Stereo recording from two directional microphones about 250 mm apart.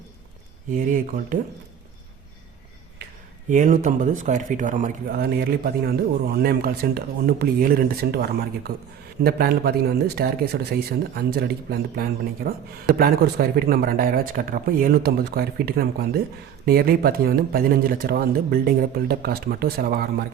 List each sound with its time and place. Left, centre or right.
0.7 s speech: right
3.5 s speech: right